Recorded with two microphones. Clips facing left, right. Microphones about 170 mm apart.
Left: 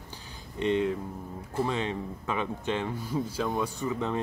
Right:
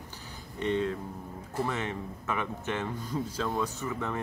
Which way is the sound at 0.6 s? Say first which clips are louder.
Left 3 dB; 15° left (ahead or behind).